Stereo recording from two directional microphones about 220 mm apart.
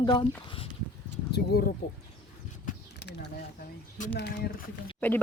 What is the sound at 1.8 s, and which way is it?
Speech, 50° left (ahead or behind).